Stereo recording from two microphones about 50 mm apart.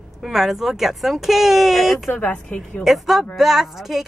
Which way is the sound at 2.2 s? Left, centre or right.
Left.